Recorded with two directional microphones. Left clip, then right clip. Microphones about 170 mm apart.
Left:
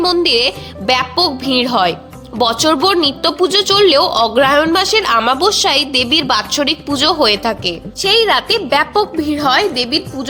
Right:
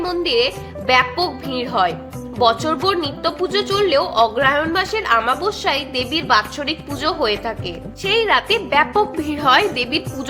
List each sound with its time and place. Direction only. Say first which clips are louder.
0.0 s speech: left 5 dB; 45° left (ahead or behind); by 10.0 s 20° left (ahead or behind)